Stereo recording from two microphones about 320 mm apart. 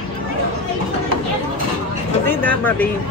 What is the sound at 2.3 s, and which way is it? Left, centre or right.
Speech, centre.